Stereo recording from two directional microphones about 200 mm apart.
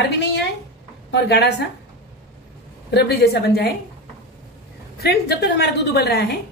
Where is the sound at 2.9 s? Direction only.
50° left (ahead or behind).